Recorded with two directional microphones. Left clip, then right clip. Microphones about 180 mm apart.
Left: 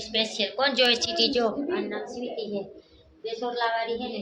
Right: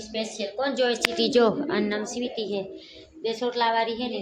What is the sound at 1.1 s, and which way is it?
A woman's voice, 75° right (ahead or behind).